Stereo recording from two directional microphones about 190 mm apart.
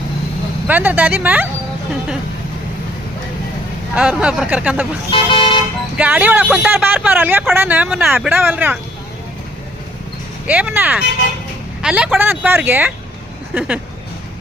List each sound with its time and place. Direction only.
0.7 s speech: 10° right (ahead or behind)
3.9 s speech: 5° right (ahead or behind)
5.1 s vehicle: 25° left (ahead or behind)
6.0 s speech: 5° right (ahead or behind)
10.4 s speech: 5° right (ahead or behind)